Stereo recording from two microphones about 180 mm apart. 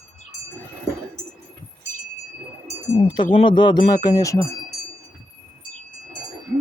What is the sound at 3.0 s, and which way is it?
Speech, 30° left (ahead or behind).